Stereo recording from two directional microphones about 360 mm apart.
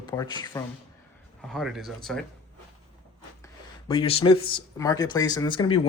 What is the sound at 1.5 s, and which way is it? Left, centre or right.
Speech, centre.